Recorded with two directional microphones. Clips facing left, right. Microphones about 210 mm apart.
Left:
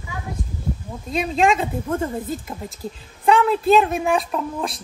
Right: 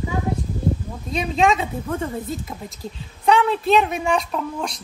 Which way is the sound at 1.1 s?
Centre (ahead or behind).